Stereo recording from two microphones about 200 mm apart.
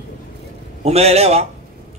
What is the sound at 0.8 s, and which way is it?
Speech, 30° right (ahead or behind).